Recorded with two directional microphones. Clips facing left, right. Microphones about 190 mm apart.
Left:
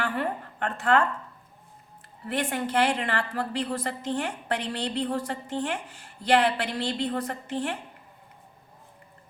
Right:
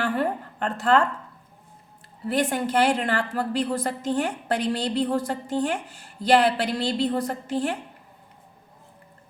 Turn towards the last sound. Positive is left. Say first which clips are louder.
# right 4 dB
turn(degrees=-35)  # may be behind; listen again after turning